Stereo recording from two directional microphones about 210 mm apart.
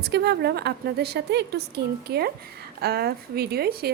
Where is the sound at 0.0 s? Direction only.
50° right (ahead or behind).